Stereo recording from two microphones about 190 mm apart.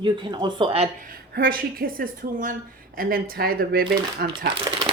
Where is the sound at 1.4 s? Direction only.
50° right (ahead or behind).